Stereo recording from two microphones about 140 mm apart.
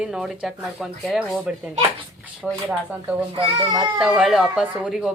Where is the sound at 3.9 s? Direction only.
5° right (ahead or behind).